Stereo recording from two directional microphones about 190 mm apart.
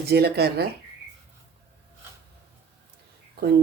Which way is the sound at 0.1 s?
55° right (ahead or behind).